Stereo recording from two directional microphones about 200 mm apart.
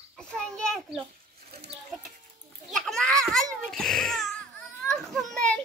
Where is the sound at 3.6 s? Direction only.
Centre (ahead or behind).